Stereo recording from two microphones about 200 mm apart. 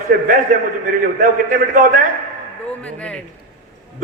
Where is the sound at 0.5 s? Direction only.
45° right (ahead or behind).